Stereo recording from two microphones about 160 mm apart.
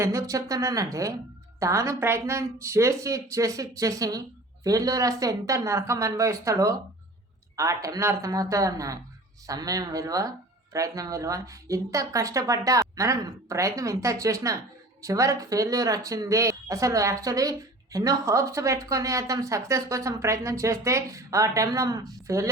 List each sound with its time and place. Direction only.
0.0 s a woman's voice: 20° right (ahead or behind)